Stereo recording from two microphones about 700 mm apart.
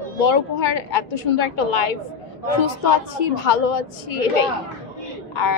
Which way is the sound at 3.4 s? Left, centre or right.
Left.